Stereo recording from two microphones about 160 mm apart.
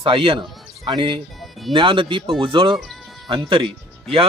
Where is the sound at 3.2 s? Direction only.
35° right (ahead or behind).